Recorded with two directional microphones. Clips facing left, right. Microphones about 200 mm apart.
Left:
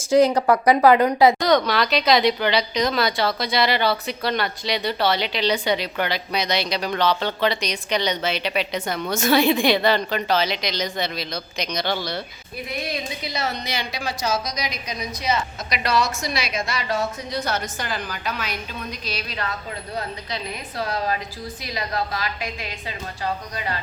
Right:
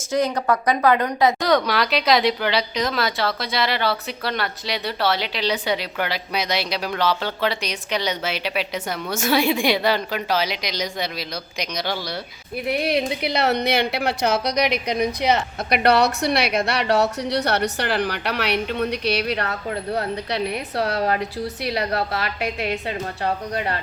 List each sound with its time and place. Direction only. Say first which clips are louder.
0.3 s speech: left 3 dB; 30° left (ahead or behind)
0.7 s speech: left 5 dB; 15° left (ahead or behind)
1.4 s speech: left 1 dB; 5° right (ahead or behind)
12.6 s a woman's voice: right 8 dB; 65° right (ahead or behind)